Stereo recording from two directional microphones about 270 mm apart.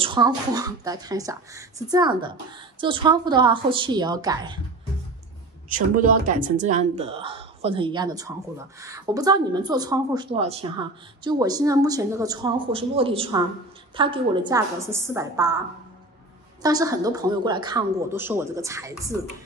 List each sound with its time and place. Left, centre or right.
0.0 s speech: centre
5.7 s speech: right; by 15.5 s centre
16.6 s speech: centre